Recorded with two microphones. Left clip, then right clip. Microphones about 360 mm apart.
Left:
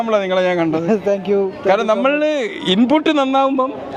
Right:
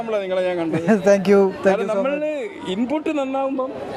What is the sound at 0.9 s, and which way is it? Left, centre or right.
Speech, right.